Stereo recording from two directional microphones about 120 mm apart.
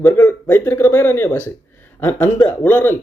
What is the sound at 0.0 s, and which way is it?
Speech, 15° left (ahead or behind).